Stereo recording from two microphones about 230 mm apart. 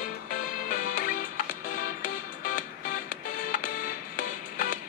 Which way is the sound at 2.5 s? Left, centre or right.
Left.